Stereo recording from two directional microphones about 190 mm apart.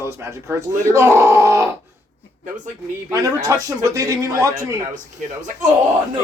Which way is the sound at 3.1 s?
20° right (ahead or behind).